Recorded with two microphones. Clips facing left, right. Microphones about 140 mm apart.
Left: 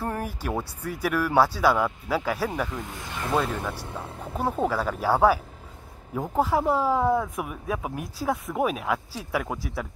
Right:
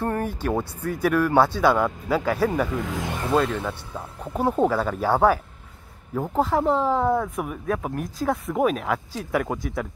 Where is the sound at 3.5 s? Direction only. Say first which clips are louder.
Right 2 dB; 10° left (ahead or behind).